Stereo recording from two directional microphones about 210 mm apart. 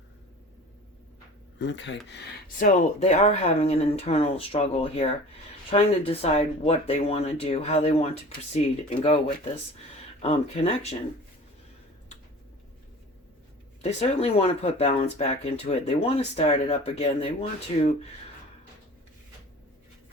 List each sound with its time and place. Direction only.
1.5 s speech: 60° left (ahead or behind)
2.6 s speech: 35° left (ahead or behind)
13.8 s speech: 30° left (ahead or behind)